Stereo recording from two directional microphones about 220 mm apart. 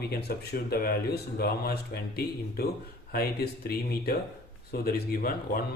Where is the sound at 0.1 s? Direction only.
45° left (ahead or behind).